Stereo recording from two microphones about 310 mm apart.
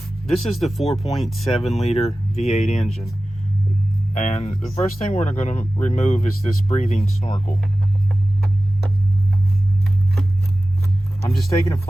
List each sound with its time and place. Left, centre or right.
0.3 s speech: centre
1.5 s speech: centre
4.1 s speech: left
11.3 s speech: centre